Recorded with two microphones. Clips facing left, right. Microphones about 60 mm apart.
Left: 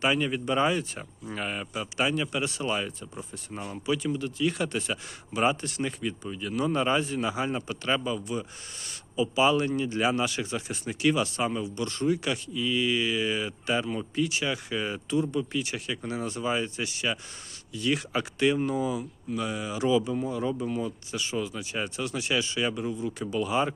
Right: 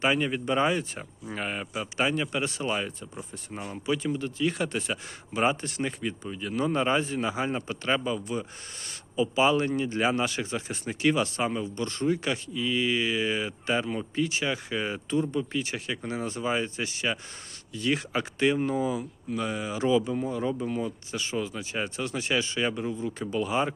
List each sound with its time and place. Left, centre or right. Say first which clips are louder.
0.0 s speech: even; right
2.7 s speech: even; right
23.3 s speech: even; right